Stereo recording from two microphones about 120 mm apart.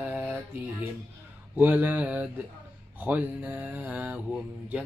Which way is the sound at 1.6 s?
15° right (ahead or behind).